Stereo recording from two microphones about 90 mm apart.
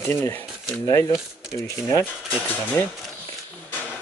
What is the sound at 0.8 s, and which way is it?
Speech, 35° left (ahead or behind).